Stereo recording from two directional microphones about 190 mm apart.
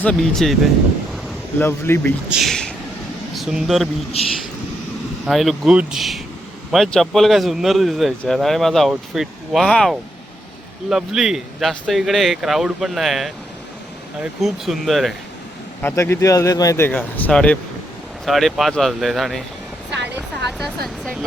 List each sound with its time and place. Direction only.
0.0 s speech: 5° left (ahead or behind)
1.1 s a sound: 10° left (ahead or behind)
3.3 s speech: centre (ahead or behind)
4.1 s speech: 30° left (ahead or behind)
5.2 s speech: centre (ahead or behind)
15.8 s speech: 10° left (ahead or behind)
20.6 s speech: centre (ahead or behind)